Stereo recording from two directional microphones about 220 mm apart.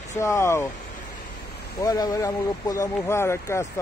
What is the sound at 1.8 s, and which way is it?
Speech, 15° left (ahead or behind).